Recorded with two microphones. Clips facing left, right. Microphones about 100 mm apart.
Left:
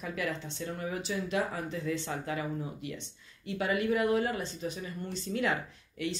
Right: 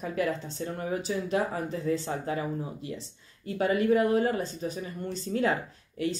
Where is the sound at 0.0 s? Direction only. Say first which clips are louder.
Right 5 dB; 40° right (ahead or behind).